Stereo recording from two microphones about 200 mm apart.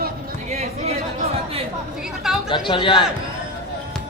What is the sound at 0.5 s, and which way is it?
Chatter, 35° right (ahead or behind).